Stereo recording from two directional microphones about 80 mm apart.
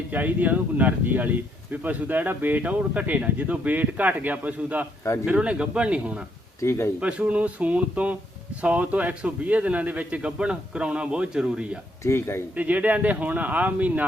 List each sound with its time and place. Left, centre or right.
0.1 s speech: right
6.6 s speech: left
7.0 s speech: centre
12.0 s speech: left
12.5 s speech: right